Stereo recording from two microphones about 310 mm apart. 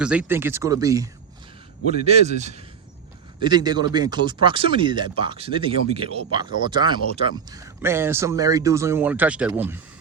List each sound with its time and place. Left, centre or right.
0.0 s speech: centre
1.9 s a man's voice: right